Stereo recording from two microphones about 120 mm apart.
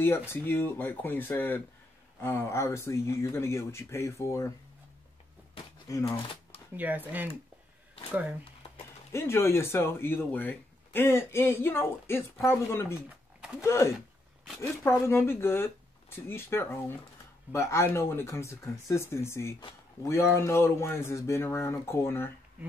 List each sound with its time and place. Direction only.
0.3 s speech: 20° left (ahead or behind)
5.9 s speech: 30° left (ahead or behind)
6.8 s speech: 15° right (ahead or behind)
9.1 s speech: 20° left (ahead or behind)